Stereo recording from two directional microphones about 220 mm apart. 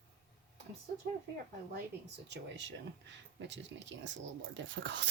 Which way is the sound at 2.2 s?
55° right (ahead or behind).